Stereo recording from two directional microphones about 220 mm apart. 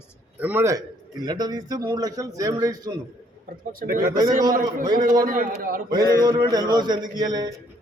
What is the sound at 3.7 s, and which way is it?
Speech, 40° right (ahead or behind).